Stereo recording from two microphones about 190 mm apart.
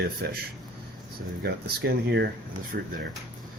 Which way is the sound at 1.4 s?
65° right (ahead or behind).